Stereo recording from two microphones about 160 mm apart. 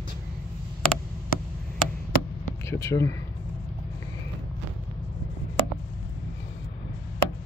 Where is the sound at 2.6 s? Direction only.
20° left (ahead or behind).